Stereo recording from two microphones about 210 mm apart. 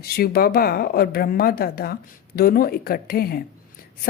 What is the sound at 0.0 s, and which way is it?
A woman's voice, 45° left (ahead or behind).